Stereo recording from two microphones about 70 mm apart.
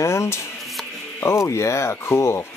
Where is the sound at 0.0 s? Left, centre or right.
Left.